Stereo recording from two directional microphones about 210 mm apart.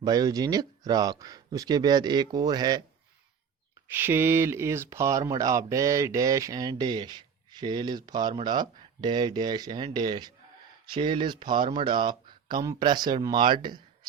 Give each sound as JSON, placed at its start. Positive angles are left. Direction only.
{"t": 0.0, "sound": "speech", "side_deg": -20}
{"t": 3.9, "sound": "speech", "side_deg": -10}